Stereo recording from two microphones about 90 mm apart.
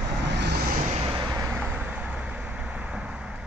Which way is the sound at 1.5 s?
15° right (ahead or behind).